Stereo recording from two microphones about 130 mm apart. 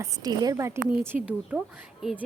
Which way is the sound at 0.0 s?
30° right (ahead or behind).